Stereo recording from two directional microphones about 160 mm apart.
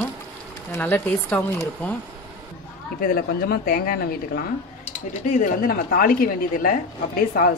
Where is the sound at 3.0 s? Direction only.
70° left (ahead or behind).